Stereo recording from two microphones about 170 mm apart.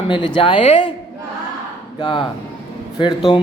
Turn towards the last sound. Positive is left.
turn(degrees=25)  # may be behind; listen again after turning